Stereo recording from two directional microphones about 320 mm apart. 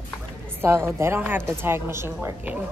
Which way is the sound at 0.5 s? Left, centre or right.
Centre.